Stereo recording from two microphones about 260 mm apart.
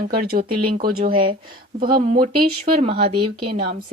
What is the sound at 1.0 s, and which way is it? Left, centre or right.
Speech, centre.